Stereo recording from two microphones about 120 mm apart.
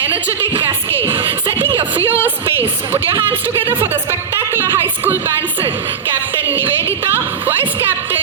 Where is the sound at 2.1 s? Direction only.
15° right (ahead or behind).